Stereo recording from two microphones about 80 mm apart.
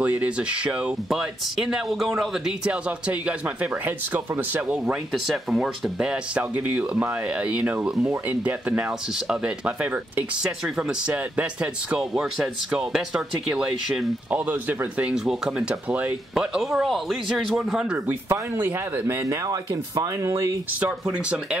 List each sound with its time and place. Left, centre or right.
0.0 s speech: centre
2.6 s speech: centre
4.8 s speech: centre
15.1 s speech: centre
16.3 s speech: centre
18.3 s speech: right
21.1 s speech: centre